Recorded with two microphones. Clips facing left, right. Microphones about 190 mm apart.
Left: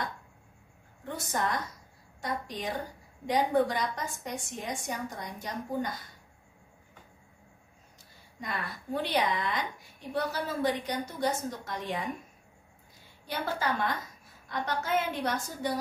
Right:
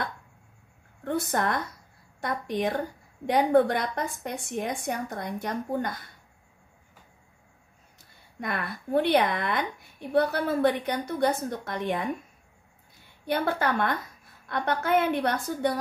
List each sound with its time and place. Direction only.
1.0 s a woman's voice: 60° right (ahead or behind)
8.4 s a woman's voice: 60° right (ahead or behind)
13.3 s a woman's voice: 60° right (ahead or behind)